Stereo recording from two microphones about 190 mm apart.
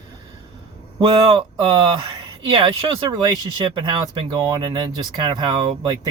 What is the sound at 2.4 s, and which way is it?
Speech, 25° right (ahead or behind).